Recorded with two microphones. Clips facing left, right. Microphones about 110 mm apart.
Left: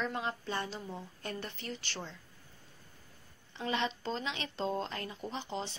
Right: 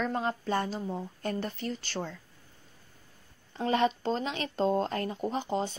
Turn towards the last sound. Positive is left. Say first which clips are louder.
# right 8 dB
turn(degrees=-45)  # may be behind; listen again after turning